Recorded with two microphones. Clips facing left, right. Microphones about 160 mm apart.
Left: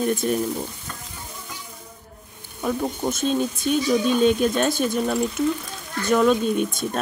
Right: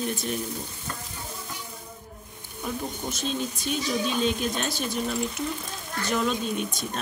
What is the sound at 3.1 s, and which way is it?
Speech, 50° left (ahead or behind).